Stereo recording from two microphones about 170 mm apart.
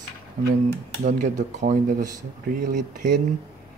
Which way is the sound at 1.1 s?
45° right (ahead or behind).